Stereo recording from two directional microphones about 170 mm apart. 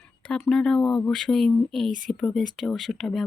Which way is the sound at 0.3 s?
5° left (ahead or behind).